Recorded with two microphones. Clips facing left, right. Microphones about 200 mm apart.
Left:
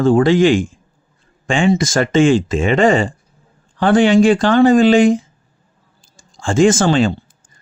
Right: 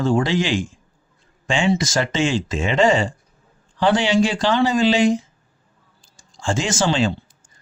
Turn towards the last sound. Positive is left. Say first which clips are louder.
# left 6 dB
turn(degrees=50)  # may be behind; listen again after turning